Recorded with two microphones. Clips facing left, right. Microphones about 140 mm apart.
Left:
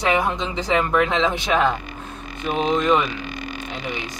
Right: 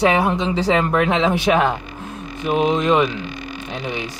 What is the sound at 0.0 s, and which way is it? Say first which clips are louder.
Speech: right 4 dB; 25° right (ahead or behind).